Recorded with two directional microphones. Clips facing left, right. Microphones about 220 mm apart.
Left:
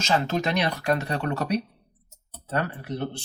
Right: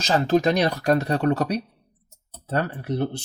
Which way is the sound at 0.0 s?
35° right (ahead or behind).